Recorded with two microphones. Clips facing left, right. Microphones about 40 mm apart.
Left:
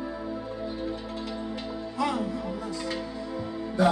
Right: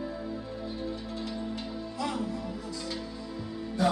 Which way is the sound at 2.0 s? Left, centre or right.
Left.